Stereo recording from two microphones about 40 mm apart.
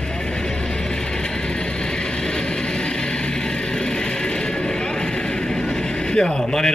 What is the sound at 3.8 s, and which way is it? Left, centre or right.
Music, left.